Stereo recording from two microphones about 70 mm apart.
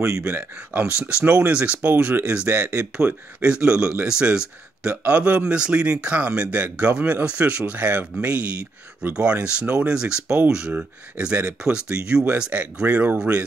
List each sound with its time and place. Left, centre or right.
0.3 s speech: right
12.8 s speech: right
13.2 s speech: centre